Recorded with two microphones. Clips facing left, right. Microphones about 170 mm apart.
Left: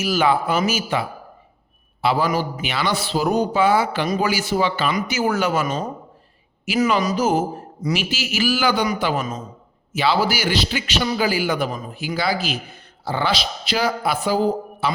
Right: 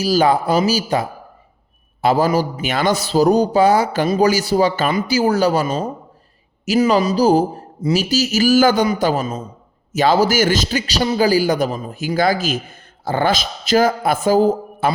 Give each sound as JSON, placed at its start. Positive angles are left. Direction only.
{"t": 0.0, "sound": "a man's voice", "side_deg": -35}